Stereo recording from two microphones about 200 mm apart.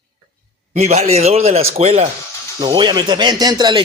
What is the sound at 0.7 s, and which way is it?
A man's voice, 35° right (ahead or behind).